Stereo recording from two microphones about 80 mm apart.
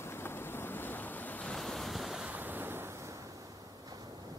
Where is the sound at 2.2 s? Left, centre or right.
Right.